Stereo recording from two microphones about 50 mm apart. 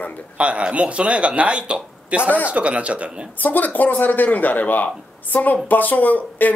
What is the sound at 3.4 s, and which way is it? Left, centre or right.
Speech, left.